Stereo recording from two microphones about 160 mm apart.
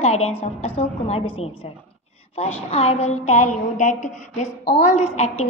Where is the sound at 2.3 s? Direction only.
40° left (ahead or behind).